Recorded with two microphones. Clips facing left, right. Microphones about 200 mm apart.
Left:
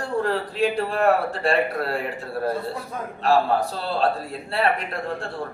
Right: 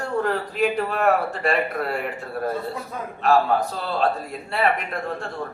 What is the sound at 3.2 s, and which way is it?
Speech, 30° left (ahead or behind).